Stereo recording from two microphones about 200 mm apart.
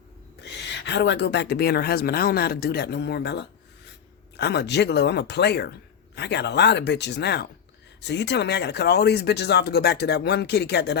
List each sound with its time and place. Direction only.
0.4 s speech: 60° left (ahead or behind)